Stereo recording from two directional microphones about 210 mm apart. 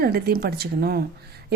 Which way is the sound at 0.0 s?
45° right (ahead or behind).